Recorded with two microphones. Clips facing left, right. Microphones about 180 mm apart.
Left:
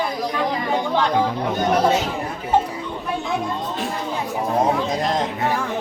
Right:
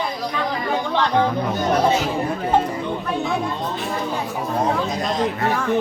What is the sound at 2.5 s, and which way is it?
Music, 10° left (ahead or behind).